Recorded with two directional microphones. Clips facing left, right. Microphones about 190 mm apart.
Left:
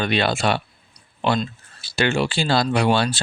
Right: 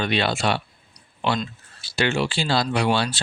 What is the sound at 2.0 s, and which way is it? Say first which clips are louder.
Speech: left 2 dB; 45° left (ahead or behind).